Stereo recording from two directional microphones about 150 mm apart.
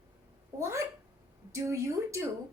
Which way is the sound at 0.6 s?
20° right (ahead or behind).